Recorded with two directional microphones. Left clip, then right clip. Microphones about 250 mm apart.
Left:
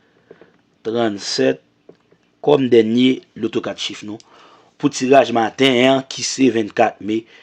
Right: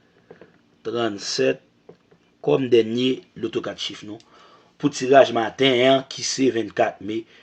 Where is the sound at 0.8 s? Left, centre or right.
Left.